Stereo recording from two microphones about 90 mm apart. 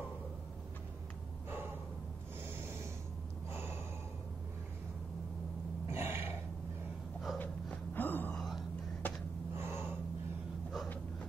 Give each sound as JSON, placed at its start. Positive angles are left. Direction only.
{"t": 3.5, "sound": "gasp", "side_deg": -25}
{"t": 5.9, "sound": "a sound", "side_deg": -25}
{"t": 7.3, "sound": "a sound", "side_deg": 20}
{"t": 8.4, "sound": "whispering", "side_deg": 0}
{"t": 9.0, "sound": "gasp", "side_deg": 20}
{"t": 9.6, "sound": "gasp", "side_deg": -25}